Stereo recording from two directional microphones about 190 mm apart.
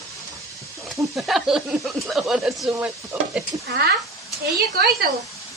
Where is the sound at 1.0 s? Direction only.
Centre (ahead or behind).